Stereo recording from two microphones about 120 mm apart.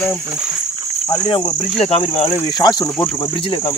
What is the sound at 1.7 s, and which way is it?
Speech, 55° left (ahead or behind).